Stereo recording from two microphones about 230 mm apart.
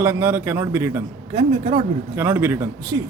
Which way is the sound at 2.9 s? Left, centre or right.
Right.